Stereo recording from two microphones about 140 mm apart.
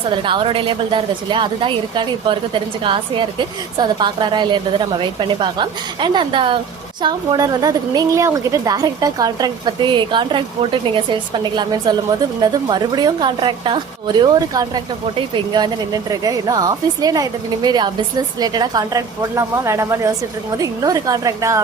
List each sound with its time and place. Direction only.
0.1 s a woman's voice: 35° right (ahead or behind)